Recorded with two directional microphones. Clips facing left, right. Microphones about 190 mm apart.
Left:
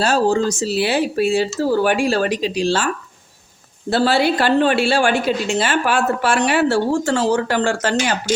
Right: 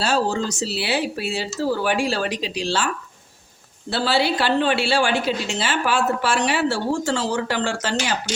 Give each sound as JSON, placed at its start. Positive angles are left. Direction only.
{"t": 0.0, "sound": "a woman's voice", "side_deg": 45}